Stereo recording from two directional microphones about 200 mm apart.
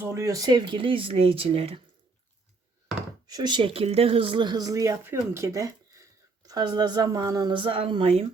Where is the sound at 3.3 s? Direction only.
20° right (ahead or behind).